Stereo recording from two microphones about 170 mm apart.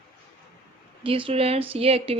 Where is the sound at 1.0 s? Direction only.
30° right (ahead or behind).